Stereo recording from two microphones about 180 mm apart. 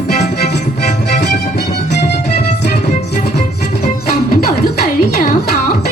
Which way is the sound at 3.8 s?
55° left (ahead or behind).